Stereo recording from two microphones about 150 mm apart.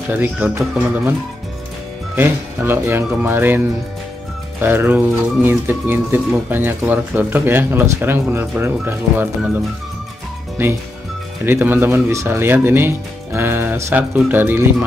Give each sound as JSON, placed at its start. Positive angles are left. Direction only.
{"t": 0.1, "sound": "speech", "side_deg": -10}
{"t": 2.1, "sound": "speech", "side_deg": -15}
{"t": 10.6, "sound": "speech", "side_deg": -15}